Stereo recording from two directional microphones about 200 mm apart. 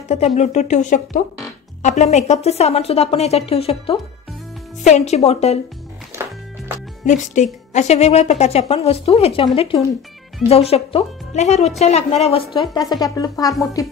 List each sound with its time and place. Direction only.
0.1 s speech: 35° left (ahead or behind)
7.7 s a woman's voice: 35° left (ahead or behind); by 13.8 s 15° left (ahead or behind)